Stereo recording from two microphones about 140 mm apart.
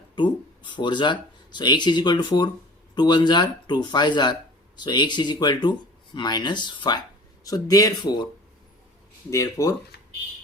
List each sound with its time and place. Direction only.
0.2 s speech: 35° left (ahead or behind)
9.3 s speech: 20° left (ahead or behind)